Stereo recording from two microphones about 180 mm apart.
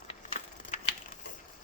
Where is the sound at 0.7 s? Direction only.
40° left (ahead or behind).